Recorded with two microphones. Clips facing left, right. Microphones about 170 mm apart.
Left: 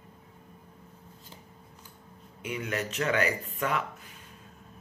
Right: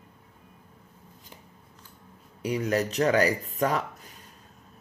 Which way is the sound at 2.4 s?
35° right (ahead or behind).